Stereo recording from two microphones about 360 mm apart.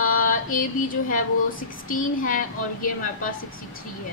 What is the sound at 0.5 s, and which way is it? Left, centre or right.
A woman's voice, left.